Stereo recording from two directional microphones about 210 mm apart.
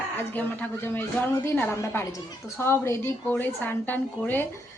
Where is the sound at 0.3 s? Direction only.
10° left (ahead or behind).